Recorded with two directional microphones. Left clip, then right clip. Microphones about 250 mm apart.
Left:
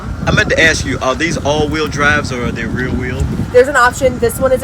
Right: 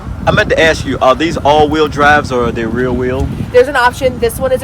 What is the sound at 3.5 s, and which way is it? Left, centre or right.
Speech, right.